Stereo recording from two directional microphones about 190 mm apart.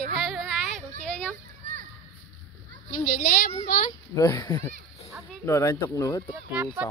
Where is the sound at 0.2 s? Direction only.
Centre (ahead or behind).